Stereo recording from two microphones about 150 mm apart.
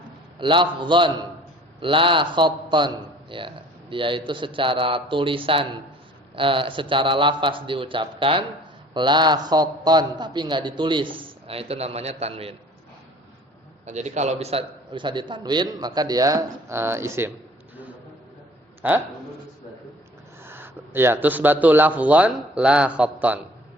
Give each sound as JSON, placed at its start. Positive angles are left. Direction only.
{"t": 0.3, "sound": "a man's voice", "side_deg": -35}
{"t": 13.8, "sound": "a man's voice", "side_deg": -50}
{"t": 18.8, "sound": "a man's voice", "side_deg": -15}
{"t": 20.4, "sound": "speech", "side_deg": -15}